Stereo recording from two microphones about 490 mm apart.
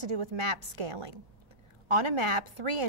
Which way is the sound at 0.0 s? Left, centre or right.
Right.